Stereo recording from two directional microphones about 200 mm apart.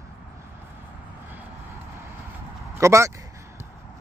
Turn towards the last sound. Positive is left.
turn(degrees=-15)  # may be behind; listen again after turning